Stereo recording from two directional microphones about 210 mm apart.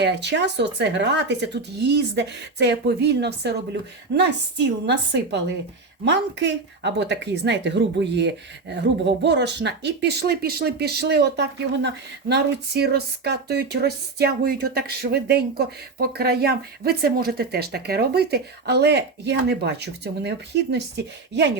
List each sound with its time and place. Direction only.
0.0 s speech: 55° right (ahead or behind)